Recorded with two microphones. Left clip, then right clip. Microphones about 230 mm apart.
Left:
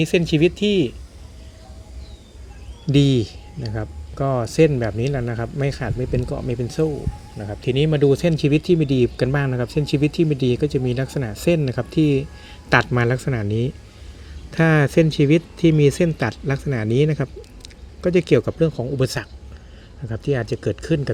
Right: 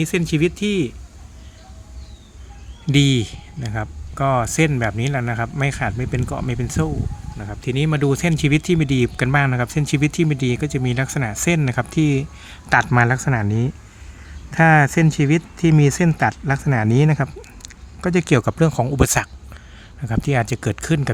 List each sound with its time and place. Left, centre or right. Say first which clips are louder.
0.0 s speech: left 2 dB; centre
2.9 s speech: even; right
14.5 s speech: right 3 dB; centre
20.4 s speech: right 1 dB; right